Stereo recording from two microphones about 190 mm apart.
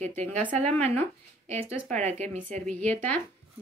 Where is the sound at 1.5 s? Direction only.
10° left (ahead or behind).